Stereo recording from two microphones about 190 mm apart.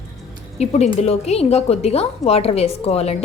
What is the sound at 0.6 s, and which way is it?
A woman's voice, 35° left (ahead or behind).